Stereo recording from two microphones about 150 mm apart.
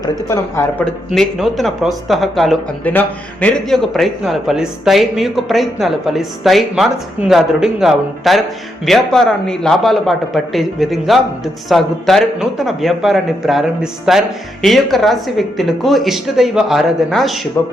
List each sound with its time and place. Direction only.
0.0 s speech: 20° left (ahead or behind)
1.1 s a man's voice: centre (ahead or behind)